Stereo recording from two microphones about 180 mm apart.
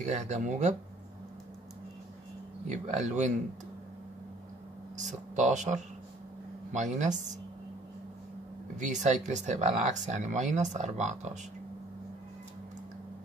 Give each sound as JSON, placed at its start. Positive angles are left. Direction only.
{"t": 0.0, "sound": "speech", "side_deg": -40}
{"t": 2.7, "sound": "speech", "side_deg": -40}
{"t": 4.9, "sound": "speech", "side_deg": -40}
{"t": 8.7, "sound": "speech", "side_deg": -40}